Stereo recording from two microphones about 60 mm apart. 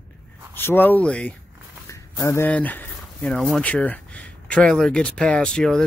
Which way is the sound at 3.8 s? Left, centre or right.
Left.